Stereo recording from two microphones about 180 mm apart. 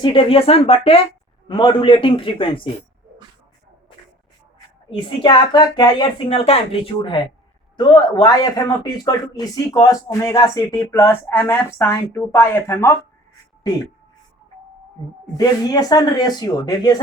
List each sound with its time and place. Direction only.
0.0 s speech: 30° left (ahead or behind)
4.9 s a man's voice: 25° left (ahead or behind)
15.4 s speech: 20° left (ahead or behind)